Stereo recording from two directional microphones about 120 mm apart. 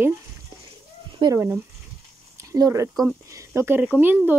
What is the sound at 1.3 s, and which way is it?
Speech, 20° right (ahead or behind).